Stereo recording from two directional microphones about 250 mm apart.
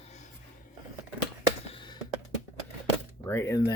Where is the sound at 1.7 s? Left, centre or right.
Centre.